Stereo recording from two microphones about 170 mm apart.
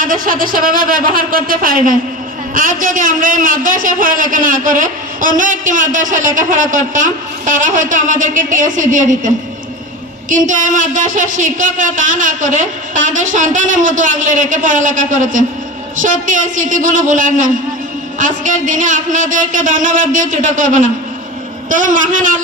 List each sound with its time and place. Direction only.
0.0 s a man's voice: 55° right (ahead or behind)